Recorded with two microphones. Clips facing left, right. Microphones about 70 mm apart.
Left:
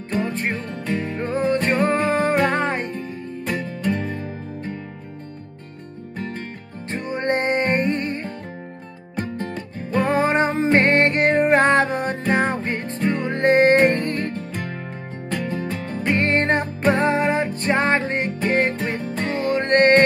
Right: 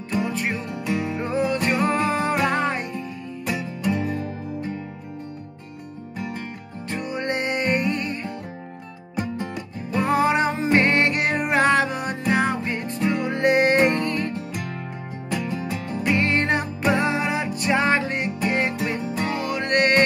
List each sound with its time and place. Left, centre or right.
0.4 s music: left
4.0 s music: centre
6.9 s music: left
10.0 s music: left
15.9 s music: left